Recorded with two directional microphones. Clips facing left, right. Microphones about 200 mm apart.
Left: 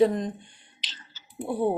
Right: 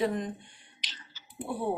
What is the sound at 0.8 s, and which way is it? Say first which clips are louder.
Clicking: left 1 dB; 25° left (ahead or behind).